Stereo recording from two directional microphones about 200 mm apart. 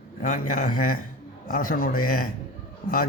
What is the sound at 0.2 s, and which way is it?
Speech, 40° left (ahead or behind).